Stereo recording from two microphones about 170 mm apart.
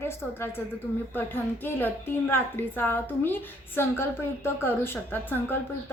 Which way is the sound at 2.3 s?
10° left (ahead or behind).